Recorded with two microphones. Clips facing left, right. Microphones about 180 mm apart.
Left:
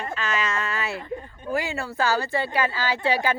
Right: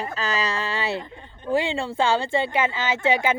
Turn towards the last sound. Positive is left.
turn(degrees=-20)  # may be behind; listen again after turning